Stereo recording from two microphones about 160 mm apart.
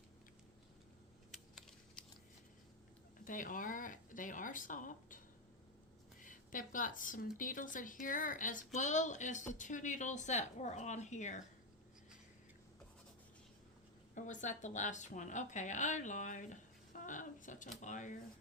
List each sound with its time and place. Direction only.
1.3 s typing: centre (ahead or behind)
3.2 s speech: 55° left (ahead or behind)
6.2 s a woman's voice: 55° left (ahead or behind)
14.2 s a woman's voice: 50° left (ahead or behind)